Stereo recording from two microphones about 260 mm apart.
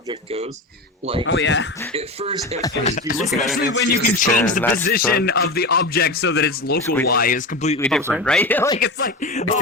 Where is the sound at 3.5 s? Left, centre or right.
Left.